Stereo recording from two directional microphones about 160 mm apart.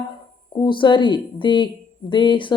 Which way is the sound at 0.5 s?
30° left (ahead or behind).